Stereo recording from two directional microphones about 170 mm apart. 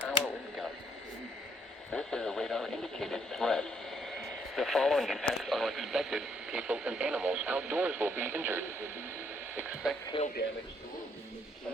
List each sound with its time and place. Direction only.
1.9 s speech: 5° left (ahead or behind)
10.1 s speech: 30° left (ahead or behind)